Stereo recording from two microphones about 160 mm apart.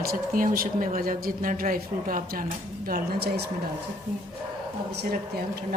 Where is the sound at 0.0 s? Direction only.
65° right (ahead or behind); by 3.5 s 90° right.